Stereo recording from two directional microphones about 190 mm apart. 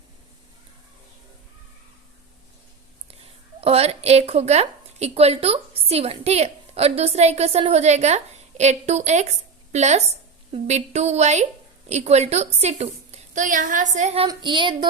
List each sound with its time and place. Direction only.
3.6 s a woman's voice: 30° right (ahead or behind)
14.3 s speech: 25° right (ahead or behind)